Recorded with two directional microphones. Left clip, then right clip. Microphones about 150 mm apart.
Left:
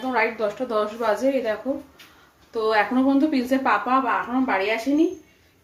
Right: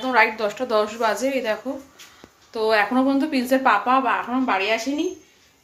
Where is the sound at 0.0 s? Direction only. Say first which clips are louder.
Right 4 dB; 10° right (ahead or behind).